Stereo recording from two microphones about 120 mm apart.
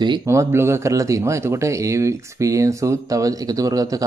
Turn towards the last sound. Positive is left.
turn(degrees=-30)  # may be behind; listen again after turning